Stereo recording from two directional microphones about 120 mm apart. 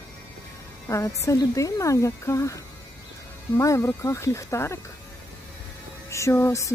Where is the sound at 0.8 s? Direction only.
25° left (ahead or behind).